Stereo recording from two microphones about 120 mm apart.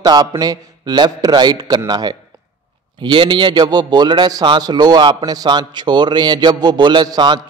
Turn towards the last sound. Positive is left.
turn(degrees=-35)  # may be behind; listen again after turning